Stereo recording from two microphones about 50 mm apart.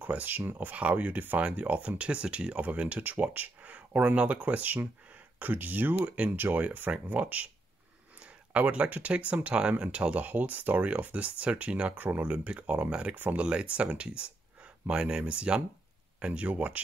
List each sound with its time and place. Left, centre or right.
0.1 s speech: right